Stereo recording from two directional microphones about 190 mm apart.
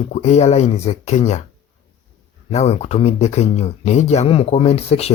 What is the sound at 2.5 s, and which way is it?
Speech, 35° left (ahead or behind).